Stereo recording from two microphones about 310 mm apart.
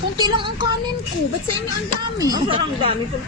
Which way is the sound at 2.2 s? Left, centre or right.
Centre.